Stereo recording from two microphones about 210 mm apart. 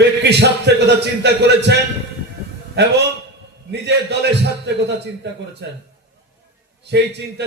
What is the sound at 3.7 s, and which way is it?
A man's voice, 50° right (ahead or behind).